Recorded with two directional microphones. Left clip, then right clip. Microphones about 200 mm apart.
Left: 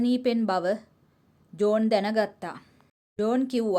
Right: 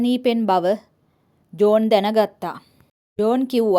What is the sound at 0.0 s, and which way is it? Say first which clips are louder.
A woman's voice: right 6 dB; 30° right (ahead or behind).